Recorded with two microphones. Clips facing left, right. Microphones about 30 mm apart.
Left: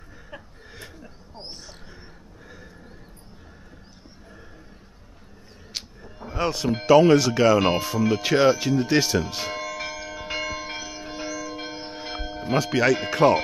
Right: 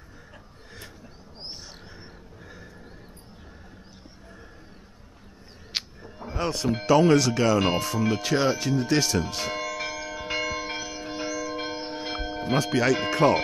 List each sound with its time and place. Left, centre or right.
1.3 s a sound: centre
2.4 s neigh: centre
5.7 s music: right
6.3 s speech: centre
9.3 s church bell: centre
12.5 s speech: centre